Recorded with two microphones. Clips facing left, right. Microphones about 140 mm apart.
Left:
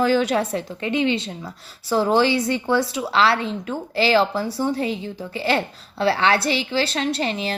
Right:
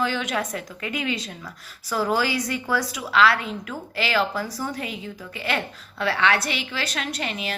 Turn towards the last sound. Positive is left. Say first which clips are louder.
# left 6 dB
turn(degrees=30)  # may be behind; listen again after turning